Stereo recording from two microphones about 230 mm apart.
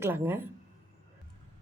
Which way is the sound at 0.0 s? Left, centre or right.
Centre.